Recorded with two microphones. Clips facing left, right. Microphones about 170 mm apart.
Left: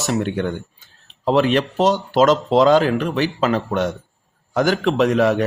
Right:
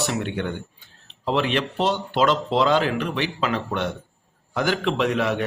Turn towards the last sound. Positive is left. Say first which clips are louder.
# left 6 dB
turn(degrees=40)  # may be behind; listen again after turning